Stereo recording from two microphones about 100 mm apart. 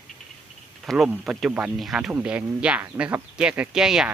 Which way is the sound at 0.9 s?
5° right (ahead or behind).